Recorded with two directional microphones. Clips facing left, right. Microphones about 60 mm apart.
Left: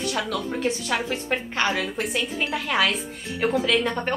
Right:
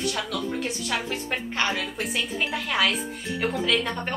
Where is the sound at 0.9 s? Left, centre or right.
Centre.